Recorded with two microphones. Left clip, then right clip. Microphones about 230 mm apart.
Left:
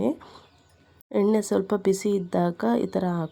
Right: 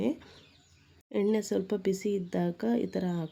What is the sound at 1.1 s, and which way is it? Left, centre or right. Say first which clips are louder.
Speech: left 6 dB; centre.